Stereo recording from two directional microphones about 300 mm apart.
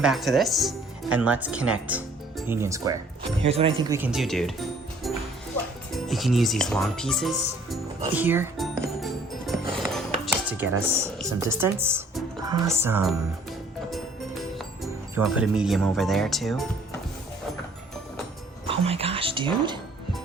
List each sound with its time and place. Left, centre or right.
0.0 s speech: centre
6.1 s music: centre
10.4 s speech: centre
15.1 s speech: centre
18.7 s music: centre